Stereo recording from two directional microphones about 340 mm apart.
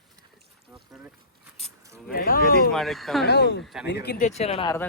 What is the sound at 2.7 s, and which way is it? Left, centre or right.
Speech, centre.